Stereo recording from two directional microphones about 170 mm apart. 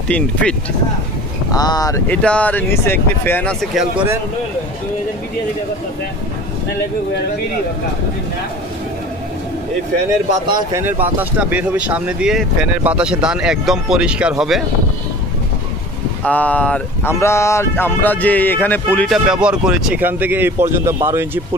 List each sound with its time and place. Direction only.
0.1 s speech: 5° left (ahead or behind)
1.5 s speech: 20° left (ahead or behind)
2.0 s speech: 10° left (ahead or behind)
10.4 s speech: 25° right (ahead or behind)
10.8 s speech: 10° right (ahead or behind)
16.3 s speech: 10° left (ahead or behind)
19.2 s speech: 5° right (ahead or behind)